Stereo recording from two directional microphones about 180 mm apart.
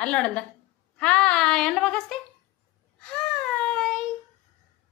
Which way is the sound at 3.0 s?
5° left (ahead or behind).